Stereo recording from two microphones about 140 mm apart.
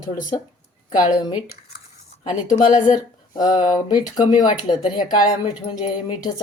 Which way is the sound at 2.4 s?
30° left (ahead or behind).